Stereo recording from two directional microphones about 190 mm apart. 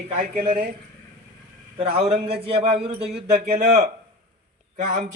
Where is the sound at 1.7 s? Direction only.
30° right (ahead or behind).